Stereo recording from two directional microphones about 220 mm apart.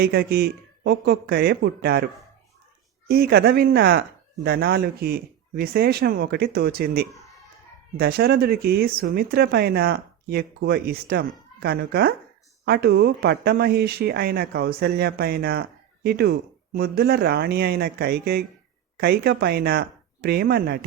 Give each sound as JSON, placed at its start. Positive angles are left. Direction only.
{"t": 0.0, "sound": "speech", "side_deg": -45}
{"t": 3.1, "sound": "speech", "side_deg": -45}